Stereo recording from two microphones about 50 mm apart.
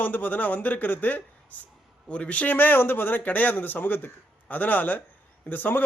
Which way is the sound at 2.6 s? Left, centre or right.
Left.